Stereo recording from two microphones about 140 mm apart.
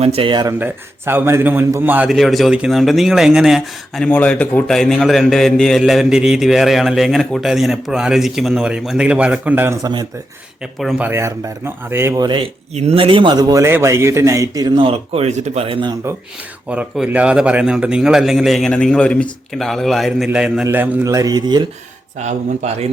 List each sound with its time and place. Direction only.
0.0 s speech: 45° right (ahead or behind)
0.4 s a man's voice: 15° right (ahead or behind)
2.0 s a man's voice: centre (ahead or behind)
4.1 s a man's voice: 10° left (ahead or behind); by 9.7 s 15° right (ahead or behind)
9.8 s speech: 30° right (ahead or behind)
10.8 s a man's voice: centre (ahead or behind)
11.0 s a man's voice: 20° right (ahead or behind)
12.2 s speech: 35° right (ahead or behind)
12.7 s speech: 45° right (ahead or behind)
13.5 s speech: 20° right (ahead or behind); by 15.6 s 50° right (ahead or behind)
15.6 s speech: 35° right (ahead or behind)
16.6 s a man's voice: 10° right (ahead or behind)
21.0 s speech: 25° right (ahead or behind)
22.2 s speech: 55° right (ahead or behind)